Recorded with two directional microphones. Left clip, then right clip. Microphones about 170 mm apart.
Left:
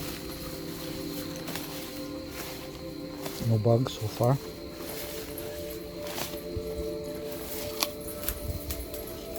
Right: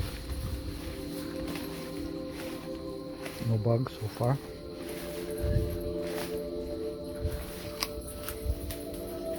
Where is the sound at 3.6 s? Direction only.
20° left (ahead or behind).